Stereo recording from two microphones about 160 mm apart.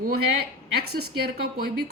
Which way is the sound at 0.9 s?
75° right (ahead or behind).